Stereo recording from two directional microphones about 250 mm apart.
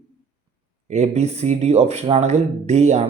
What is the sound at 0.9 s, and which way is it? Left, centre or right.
A man's voice, right.